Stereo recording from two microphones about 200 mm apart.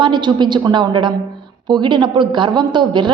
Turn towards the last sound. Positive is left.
turn(degrees=-20)  # may be behind; listen again after turning